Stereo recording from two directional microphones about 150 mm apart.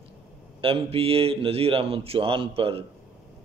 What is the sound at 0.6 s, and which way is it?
Speech, 40° right (ahead or behind).